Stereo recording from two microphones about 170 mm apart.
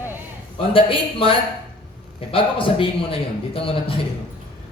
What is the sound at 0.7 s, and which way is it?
A man's voice, 30° left (ahead or behind).